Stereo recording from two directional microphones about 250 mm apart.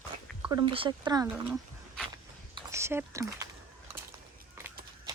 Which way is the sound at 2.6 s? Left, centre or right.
Centre.